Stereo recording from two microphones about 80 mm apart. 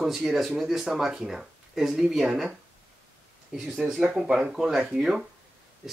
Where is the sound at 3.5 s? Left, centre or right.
Centre.